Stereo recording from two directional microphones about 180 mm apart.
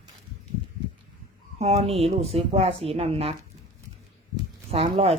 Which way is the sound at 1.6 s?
35° right (ahead or behind).